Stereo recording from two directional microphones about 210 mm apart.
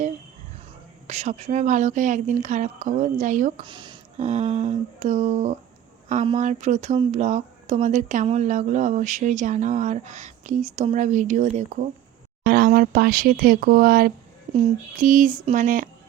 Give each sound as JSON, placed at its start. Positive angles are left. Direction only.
{"t": 1.0, "sound": "speech", "side_deg": -35}
{"t": 3.6, "sound": "speech", "side_deg": -20}
{"t": 4.2, "sound": "speech", "side_deg": -35}
{"t": 12.4, "sound": "speech", "side_deg": -45}
{"t": 15.3, "sound": "speech", "side_deg": -20}
{"t": 15.5, "sound": "speech", "side_deg": -40}